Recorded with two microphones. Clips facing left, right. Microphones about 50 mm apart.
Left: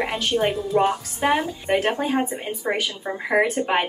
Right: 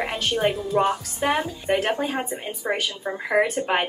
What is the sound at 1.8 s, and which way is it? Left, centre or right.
Speech, centre.